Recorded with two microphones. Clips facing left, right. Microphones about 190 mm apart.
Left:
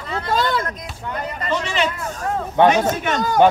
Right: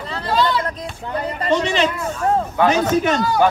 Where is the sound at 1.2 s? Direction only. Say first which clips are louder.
Right 6 dB; 30° right (ahead or behind).